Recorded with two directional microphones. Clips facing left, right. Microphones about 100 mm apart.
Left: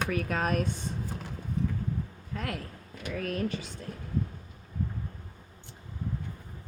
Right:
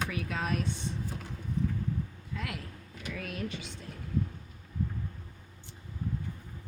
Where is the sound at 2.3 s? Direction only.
40° left (ahead or behind).